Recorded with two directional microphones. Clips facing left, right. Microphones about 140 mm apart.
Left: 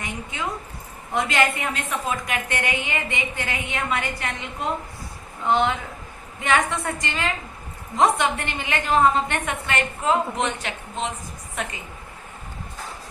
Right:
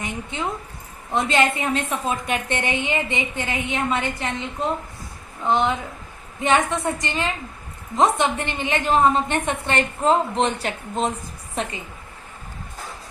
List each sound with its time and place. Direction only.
0.0 s zipper: 25° right (ahead or behind)
1.1 s a woman's voice: 25° right (ahead or behind)
5.5 s a woman's voice: 20° right (ahead or behind)